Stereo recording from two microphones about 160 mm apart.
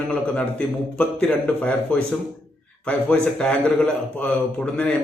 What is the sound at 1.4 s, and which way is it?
A man's voice, 10° left (ahead or behind).